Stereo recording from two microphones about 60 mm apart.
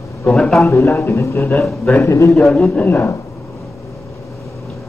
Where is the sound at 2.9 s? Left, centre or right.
Left.